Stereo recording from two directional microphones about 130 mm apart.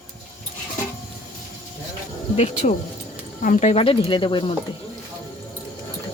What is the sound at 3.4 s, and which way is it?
Speech, 70° left (ahead or behind).